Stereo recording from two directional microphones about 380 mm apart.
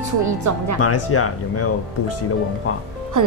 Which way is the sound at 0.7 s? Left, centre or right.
Left.